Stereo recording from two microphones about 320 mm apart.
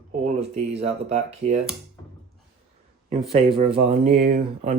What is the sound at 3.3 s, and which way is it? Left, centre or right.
Speech, centre.